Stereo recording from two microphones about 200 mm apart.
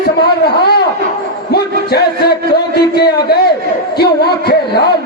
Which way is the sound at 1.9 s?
55° left (ahead or behind).